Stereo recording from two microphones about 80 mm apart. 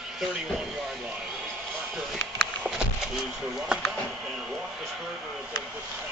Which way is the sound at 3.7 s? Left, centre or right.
Centre.